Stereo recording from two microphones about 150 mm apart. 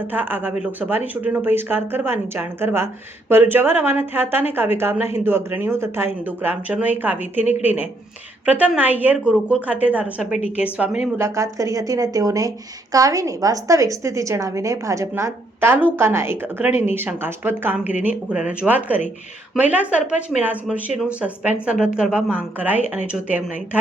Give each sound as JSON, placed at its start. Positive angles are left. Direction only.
{"t": 0.1, "sound": "a woman's voice", "side_deg": -15}